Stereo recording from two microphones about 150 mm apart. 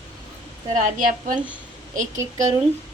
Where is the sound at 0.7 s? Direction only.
60° right (ahead or behind).